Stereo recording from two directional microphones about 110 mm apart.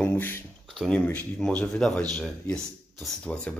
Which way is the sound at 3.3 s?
10° left (ahead or behind).